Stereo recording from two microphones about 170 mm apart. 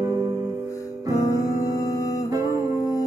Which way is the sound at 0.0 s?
20° right (ahead or behind).